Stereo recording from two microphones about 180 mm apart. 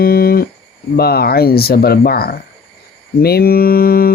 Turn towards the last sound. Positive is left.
turn(degrees=55)  # may be behind; listen again after turning